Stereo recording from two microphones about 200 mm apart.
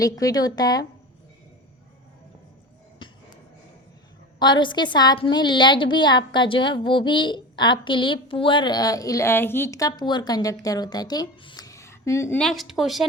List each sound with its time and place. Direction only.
0.0 s a woman's voice: 20° left (ahead or behind)
4.4 s a woman's voice: 20° left (ahead or behind)
12.4 s speech: centre (ahead or behind)